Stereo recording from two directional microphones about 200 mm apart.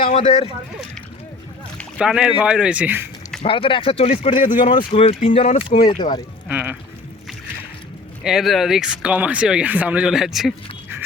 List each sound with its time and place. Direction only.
0.0 s speech: 30° left (ahead or behind)
2.0 s speech: 5° right (ahead or behind)
3.4 s speech: 25° left (ahead or behind); by 4.7 s 40° left (ahead or behind)
4.9 s speech: 30° left (ahead or behind)
6.5 s speech: 5° right (ahead or behind)
8.2 s speech: centre (ahead or behind)